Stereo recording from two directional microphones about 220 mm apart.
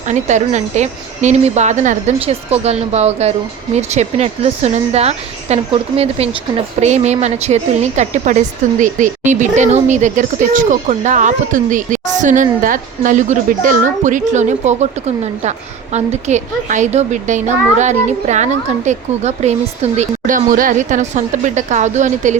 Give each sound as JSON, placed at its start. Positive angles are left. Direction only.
{"t": 0.1, "sound": "a woman's voice", "side_deg": -30}
{"t": 6.7, "sound": "a woman's voice", "side_deg": -30}